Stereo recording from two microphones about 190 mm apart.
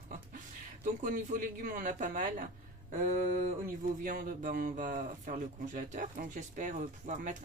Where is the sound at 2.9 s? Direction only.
40° right (ahead or behind).